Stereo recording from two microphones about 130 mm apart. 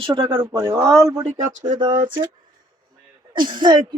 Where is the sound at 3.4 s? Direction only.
35° right (ahead or behind).